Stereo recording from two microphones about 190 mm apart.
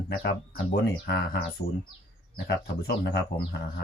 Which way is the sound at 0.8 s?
55° left (ahead or behind).